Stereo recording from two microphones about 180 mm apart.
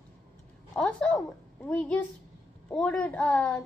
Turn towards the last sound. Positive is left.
turn(degrees=10)  # may be behind; listen again after turning